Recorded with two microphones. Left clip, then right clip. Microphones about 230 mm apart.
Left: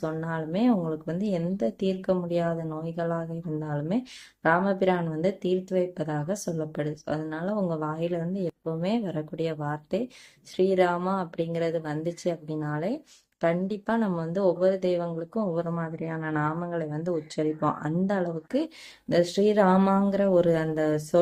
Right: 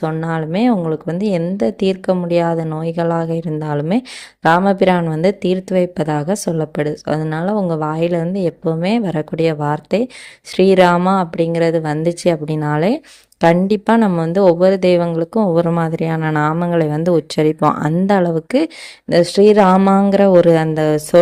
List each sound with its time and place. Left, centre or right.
0.0 s speech: right